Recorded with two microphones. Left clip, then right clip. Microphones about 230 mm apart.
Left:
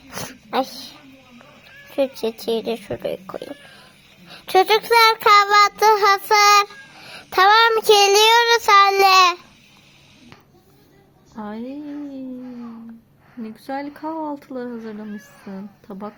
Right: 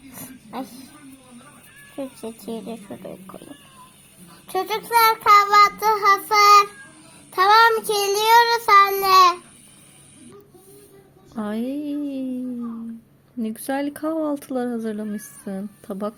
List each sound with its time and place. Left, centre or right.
0.1 s a sound: left
2.2 s child singing: left
11.3 s speech: right
13.4 s speech: right